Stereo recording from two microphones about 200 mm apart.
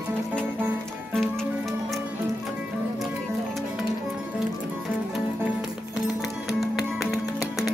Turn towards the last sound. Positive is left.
turn(degrees=0)  # may be behind; listen again after turning